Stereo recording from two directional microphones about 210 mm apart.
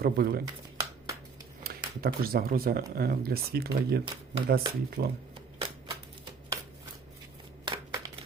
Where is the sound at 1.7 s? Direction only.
45° right (ahead or behind).